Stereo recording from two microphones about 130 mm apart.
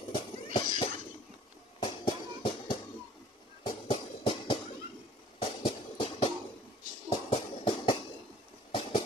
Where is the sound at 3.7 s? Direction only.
40° left (ahead or behind).